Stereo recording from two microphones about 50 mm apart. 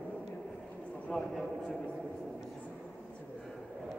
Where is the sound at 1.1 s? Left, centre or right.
Left.